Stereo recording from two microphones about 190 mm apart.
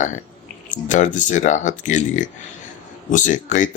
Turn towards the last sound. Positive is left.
turn(degrees=40)  # may be behind; listen again after turning